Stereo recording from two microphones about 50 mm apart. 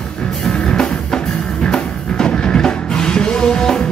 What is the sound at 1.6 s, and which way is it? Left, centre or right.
Music, centre.